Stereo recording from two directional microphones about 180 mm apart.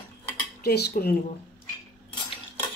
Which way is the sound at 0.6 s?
60° left (ahead or behind).